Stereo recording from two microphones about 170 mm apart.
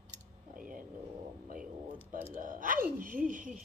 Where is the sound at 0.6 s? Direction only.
55° right (ahead or behind).